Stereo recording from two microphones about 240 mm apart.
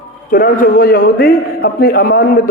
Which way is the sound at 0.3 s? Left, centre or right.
Left.